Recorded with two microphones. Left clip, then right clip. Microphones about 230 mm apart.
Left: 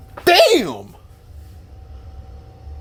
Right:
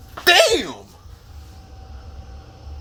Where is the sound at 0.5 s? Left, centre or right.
Left.